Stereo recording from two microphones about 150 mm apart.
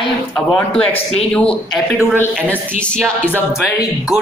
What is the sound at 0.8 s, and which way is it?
Speech, 40° left (ahead or behind).